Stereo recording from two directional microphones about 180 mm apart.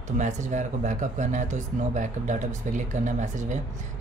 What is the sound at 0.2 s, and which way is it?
Speech, 40° right (ahead or behind).